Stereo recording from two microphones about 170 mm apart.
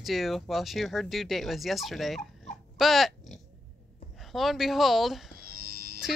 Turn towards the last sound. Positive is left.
turn(degrees=-60)  # may be behind; listen again after turning